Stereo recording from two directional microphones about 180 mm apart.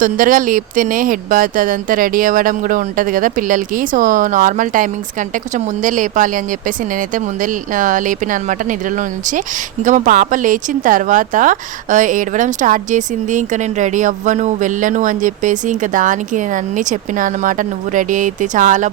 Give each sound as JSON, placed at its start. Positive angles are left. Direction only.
{"t": 0.0, "sound": "speech", "side_deg": -50}
{"t": 7.4, "sound": "speech", "side_deg": -45}
{"t": 9.8, "sound": "speech", "side_deg": -45}